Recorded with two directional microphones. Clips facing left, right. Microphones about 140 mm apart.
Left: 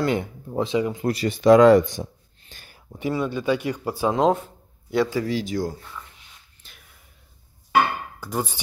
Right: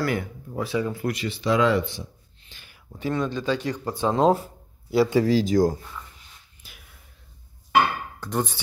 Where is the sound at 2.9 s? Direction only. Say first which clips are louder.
Left 1 dB; 10° left (ahead or behind).